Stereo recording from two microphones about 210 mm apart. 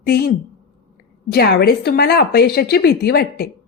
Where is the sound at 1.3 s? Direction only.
50° left (ahead or behind).